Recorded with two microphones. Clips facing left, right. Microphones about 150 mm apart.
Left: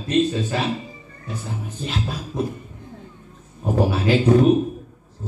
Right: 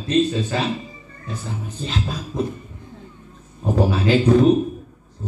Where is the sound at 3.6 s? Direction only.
10° left (ahead or behind).